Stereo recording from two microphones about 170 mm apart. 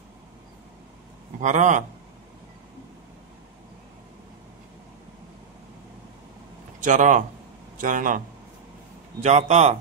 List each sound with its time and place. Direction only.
1.4 s a man's voice: 45° right (ahead or behind)
6.8 s a man's voice: 50° right (ahead or behind)
9.2 s a man's voice: 40° right (ahead or behind)